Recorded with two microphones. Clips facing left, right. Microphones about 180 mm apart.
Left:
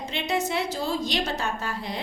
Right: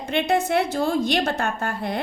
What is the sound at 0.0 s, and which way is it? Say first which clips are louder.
A woman's voice: right 6 dB; 55° right (ahead or behind).